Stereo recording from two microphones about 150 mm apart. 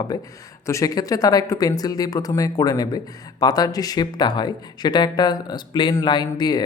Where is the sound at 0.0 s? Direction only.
25° left (ahead or behind).